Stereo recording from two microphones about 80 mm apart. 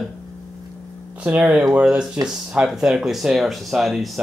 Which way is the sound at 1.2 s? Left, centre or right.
Centre.